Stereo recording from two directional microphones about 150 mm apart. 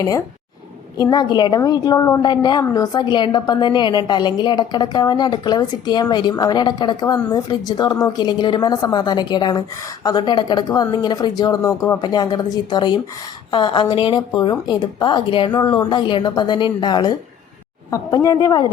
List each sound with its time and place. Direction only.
0.9 s a woman's voice: 25° left (ahead or behind)